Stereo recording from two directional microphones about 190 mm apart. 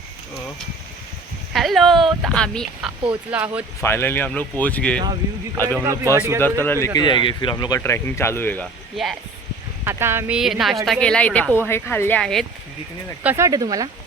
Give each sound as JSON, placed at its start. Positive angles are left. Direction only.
{"t": 1.5, "sound": "a sound", "side_deg": 0}
{"t": 2.0, "sound": "speech", "side_deg": 0}
{"t": 3.1, "sound": "speech", "side_deg": -10}
{"t": 3.8, "sound": "speech", "side_deg": 10}
{"t": 5.8, "sound": "speech", "side_deg": -15}
{"t": 6.4, "sound": "speech", "side_deg": 10}
{"t": 9.8, "sound": "speech", "side_deg": -15}
{"t": 13.2, "sound": "speech", "side_deg": -15}